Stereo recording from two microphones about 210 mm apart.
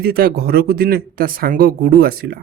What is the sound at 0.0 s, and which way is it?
Speech, 45° right (ahead or behind).